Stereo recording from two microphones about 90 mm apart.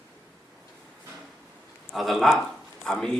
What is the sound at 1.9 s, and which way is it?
A man's voice, centre (ahead or behind).